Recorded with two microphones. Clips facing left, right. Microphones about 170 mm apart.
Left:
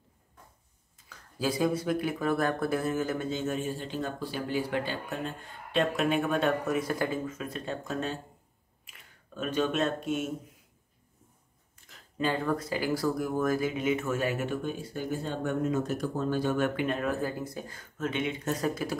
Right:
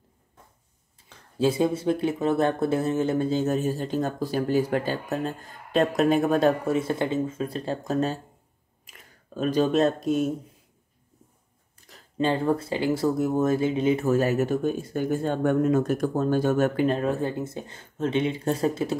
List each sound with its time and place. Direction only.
1.0 s speech: 25° right (ahead or behind)
11.9 s speech: 30° right (ahead or behind)